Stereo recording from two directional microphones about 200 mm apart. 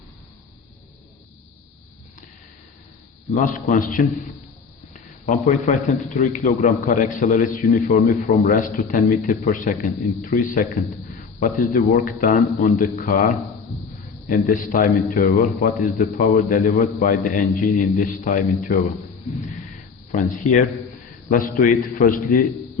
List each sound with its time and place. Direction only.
3.3 s a man's voice: 40° left (ahead or behind)
4.9 s a sound: 40° left (ahead or behind)
6.1 s a man's voice: 40° left (ahead or behind)
8.0 s a man's voice: 45° left (ahead or behind)
20.1 s a man's voice: 40° left (ahead or behind)